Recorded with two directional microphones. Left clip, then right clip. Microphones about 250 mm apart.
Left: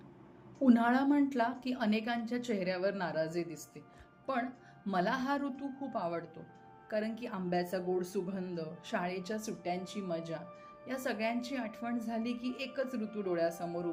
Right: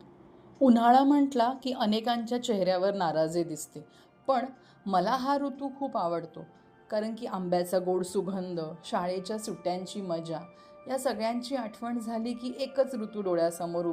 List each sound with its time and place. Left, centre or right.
0.6 s a woman's voice: centre
4.9 s a woman's voice: centre